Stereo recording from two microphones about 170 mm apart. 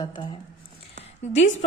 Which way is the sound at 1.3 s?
90° left.